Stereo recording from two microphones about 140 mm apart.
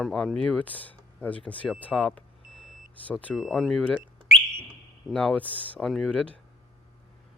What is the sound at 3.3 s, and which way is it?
Speech, centre (ahead or behind).